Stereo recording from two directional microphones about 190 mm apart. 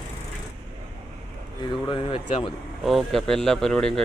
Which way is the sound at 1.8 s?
25° left (ahead or behind).